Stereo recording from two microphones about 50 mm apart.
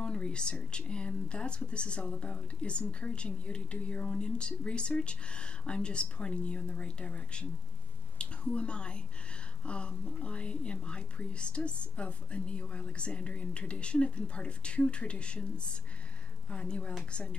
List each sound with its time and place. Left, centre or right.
0.0 s a woman's voice: centre